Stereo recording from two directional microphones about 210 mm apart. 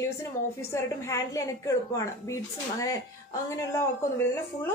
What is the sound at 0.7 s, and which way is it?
A woman's voice, 15° left (ahead or behind).